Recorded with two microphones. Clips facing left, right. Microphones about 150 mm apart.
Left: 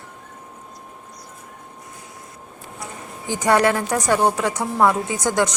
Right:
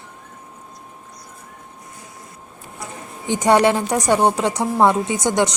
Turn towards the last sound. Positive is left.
turn(degrees=-20)  # may be behind; listen again after turning